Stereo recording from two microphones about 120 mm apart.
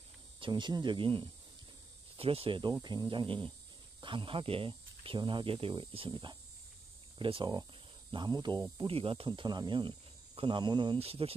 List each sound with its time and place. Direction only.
0.4 s speech: 40° right (ahead or behind)
8.7 s speech: 50° right (ahead or behind)
11.0 s speech: 55° right (ahead or behind)